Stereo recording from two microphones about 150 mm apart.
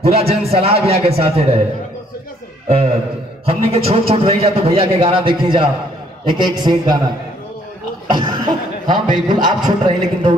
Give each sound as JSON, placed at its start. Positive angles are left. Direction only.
{"t": 0.0, "sound": "a man's voice", "side_deg": -40}
{"t": 2.7, "sound": "a man's voice", "side_deg": -45}
{"t": 8.1, "sound": "a man's voice", "side_deg": -30}